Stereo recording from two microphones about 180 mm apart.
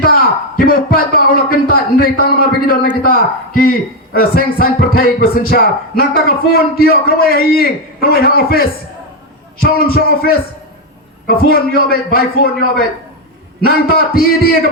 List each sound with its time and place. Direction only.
0.0 s a man's voice: 55° left (ahead or behind)